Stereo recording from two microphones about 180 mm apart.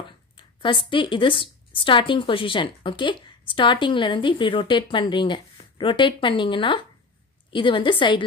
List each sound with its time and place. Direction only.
0.4 s a woman's voice: 25° left (ahead or behind)